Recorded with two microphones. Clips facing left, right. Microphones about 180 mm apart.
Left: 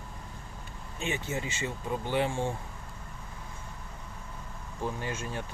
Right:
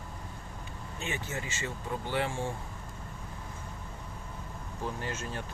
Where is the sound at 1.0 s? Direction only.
20° left (ahead or behind).